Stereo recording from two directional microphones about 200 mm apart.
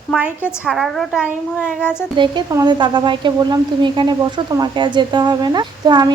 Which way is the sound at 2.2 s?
20° right (ahead or behind).